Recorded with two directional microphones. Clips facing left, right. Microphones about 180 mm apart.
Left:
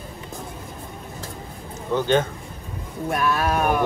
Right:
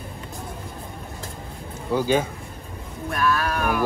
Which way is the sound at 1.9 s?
10° right (ahead or behind).